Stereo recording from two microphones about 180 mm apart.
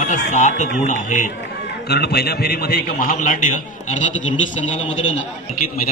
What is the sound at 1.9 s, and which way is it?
A man's voice, 60° left (ahead or behind).